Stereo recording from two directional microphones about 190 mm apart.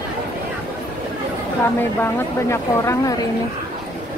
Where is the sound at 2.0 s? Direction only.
15° left (ahead or behind).